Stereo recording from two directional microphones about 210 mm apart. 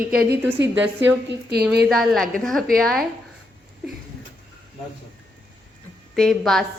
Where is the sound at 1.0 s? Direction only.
50° right (ahead or behind).